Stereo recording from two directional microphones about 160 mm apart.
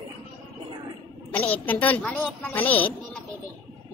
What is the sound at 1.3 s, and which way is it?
A woman's voice, 10° left (ahead or behind).